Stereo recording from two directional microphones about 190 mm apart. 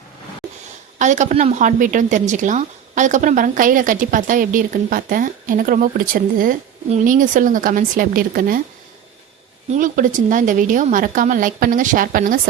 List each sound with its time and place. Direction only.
0.9 s a woman's voice: 40° right (ahead or behind)
9.7 s a woman's voice: 45° right (ahead or behind)